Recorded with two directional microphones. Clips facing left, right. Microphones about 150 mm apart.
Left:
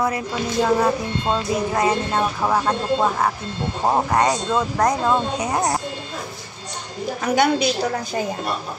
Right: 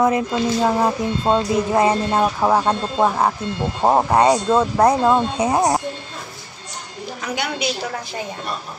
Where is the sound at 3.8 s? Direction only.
30° right (ahead or behind).